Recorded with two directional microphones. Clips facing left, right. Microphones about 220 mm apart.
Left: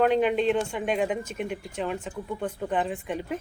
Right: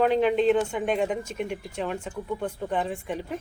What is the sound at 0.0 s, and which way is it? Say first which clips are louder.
Speech: right 1 dB; centre (ahead or behind).